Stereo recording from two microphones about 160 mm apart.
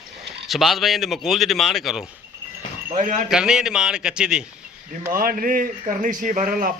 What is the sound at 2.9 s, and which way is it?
Speech, 50° right (ahead or behind).